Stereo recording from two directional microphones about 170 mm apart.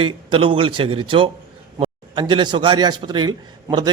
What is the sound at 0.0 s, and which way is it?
A man's voice, 30° right (ahead or behind).